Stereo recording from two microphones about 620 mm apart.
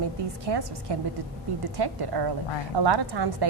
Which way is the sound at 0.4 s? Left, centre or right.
Right.